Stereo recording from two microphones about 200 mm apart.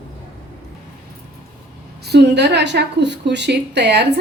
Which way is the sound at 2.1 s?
55° right (ahead or behind).